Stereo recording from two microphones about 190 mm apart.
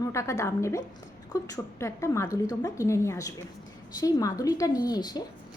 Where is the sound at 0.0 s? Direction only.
15° left (ahead or behind).